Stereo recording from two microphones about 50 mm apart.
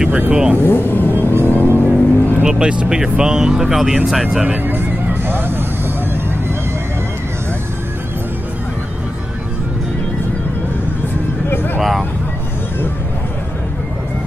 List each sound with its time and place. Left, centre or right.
0.3 s speech: centre
0.6 s speech: left
1.4 s vehicle: left
2.4 s speech: right
11.5 s a sound: left